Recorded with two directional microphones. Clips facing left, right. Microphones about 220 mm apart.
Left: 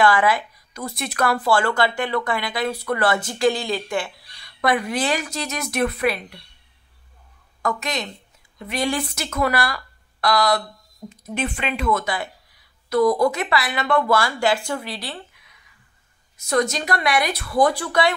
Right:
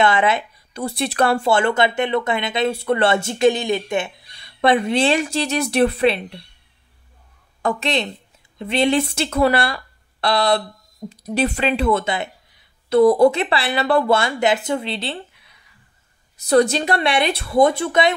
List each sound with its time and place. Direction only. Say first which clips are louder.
0.0 s speech: right 1 dB; 25° right (ahead or behind)
7.6 s speech: right 5 dB; 30° right (ahead or behind)